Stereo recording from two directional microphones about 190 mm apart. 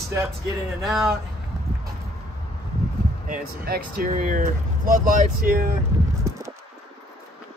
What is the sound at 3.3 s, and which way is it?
Speech, 50° right (ahead or behind).